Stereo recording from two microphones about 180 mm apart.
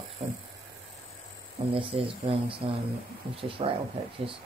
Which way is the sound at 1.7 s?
30° right (ahead or behind).